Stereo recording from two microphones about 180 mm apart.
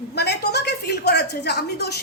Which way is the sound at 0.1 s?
65° left (ahead or behind).